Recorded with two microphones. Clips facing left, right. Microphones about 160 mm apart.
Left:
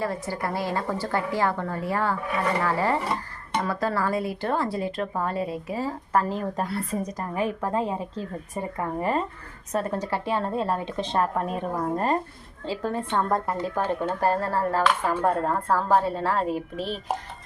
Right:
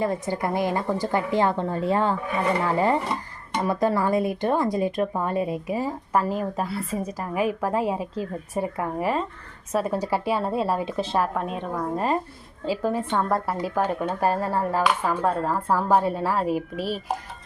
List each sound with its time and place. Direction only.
0.0 s a woman's voice: 20° right (ahead or behind)